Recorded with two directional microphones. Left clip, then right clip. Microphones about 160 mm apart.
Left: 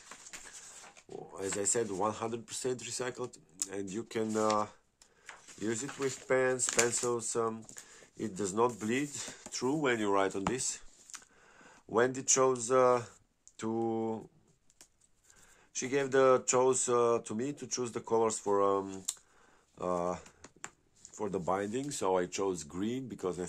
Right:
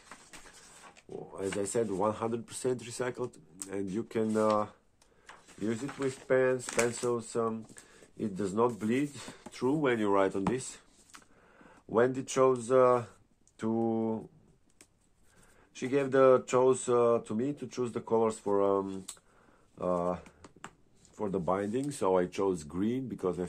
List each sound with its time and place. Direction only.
1.1 s speech: 15° left (ahead or behind)
5.6 s speech: 30° left (ahead or behind); by 10.4 s 15° left (ahead or behind)
10.4 s a sound: 20° left (ahead or behind)
13.6 s speech: 15° left (ahead or behind)
15.7 s speech: 15° left (ahead or behind)